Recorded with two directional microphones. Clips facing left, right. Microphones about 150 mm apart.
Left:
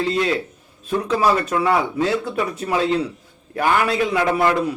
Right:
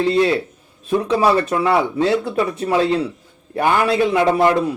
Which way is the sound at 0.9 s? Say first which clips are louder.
Right 3 dB; 20° right (ahead or behind).